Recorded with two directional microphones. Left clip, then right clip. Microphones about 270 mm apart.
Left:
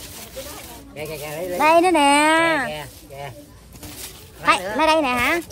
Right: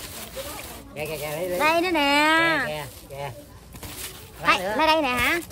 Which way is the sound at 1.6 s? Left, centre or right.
Centre.